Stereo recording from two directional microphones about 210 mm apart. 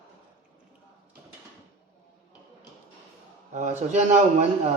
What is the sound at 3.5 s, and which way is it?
A man's voice, 35° right (ahead or behind).